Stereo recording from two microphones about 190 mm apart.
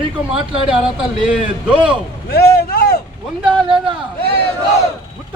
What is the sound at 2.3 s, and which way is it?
Speech, 55° left (ahead or behind).